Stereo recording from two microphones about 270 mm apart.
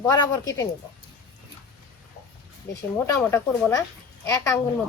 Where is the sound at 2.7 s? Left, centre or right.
Centre.